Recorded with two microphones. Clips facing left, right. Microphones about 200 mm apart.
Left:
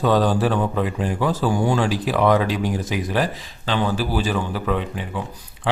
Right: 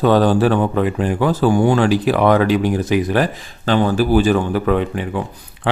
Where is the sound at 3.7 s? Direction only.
50° right (ahead or behind).